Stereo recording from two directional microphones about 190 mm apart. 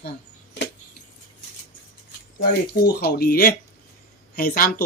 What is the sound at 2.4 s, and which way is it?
Speech, 55° left (ahead or behind).